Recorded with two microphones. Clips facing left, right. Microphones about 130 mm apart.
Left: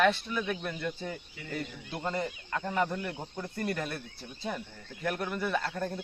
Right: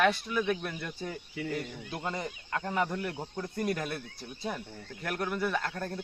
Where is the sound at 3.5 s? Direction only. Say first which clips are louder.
Right 1 dB; 10° right (ahead or behind).